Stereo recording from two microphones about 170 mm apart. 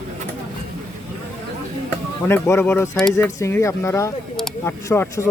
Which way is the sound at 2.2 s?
15° left (ahead or behind).